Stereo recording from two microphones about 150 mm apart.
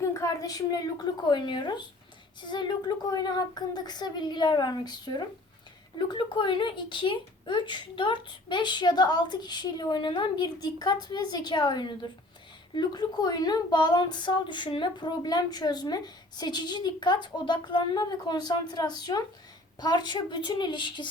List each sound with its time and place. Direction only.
0.0 s a woman's voice: 20° left (ahead or behind)